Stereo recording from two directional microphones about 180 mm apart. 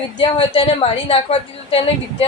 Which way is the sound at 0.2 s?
25° left (ahead or behind).